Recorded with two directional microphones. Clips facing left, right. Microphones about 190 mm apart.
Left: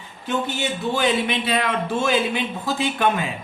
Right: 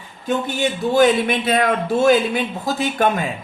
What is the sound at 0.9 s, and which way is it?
A man's voice, 45° right (ahead or behind).